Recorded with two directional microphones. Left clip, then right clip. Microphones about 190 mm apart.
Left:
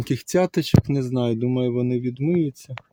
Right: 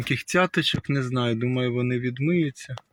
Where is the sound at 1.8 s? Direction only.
20° left (ahead or behind).